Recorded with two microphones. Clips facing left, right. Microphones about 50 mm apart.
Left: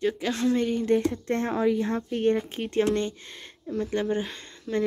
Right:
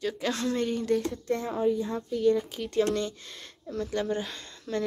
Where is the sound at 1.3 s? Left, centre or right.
Left.